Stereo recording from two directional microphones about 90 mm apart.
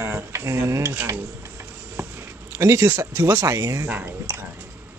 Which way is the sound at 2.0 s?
25° right (ahead or behind).